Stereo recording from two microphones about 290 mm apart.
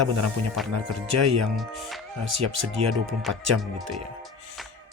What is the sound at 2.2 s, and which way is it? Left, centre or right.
Speech, right.